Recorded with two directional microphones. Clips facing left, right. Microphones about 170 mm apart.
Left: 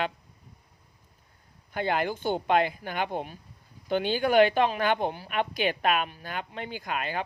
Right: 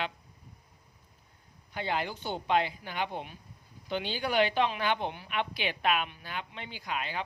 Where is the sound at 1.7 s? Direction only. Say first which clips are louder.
Left 5 dB; 55° left (ahead or behind).